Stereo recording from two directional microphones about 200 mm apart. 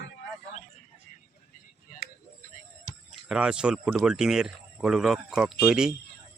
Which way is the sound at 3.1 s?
5° right (ahead or behind).